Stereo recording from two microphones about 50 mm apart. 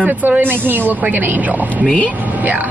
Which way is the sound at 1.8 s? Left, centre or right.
Left.